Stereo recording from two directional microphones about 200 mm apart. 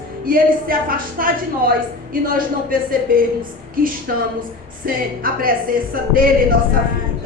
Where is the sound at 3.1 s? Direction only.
45° right (ahead or behind).